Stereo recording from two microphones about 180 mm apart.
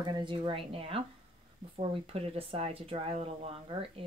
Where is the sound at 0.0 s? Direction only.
25° right (ahead or behind).